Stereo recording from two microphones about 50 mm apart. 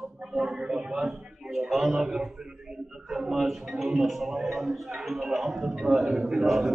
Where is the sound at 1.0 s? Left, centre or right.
Centre.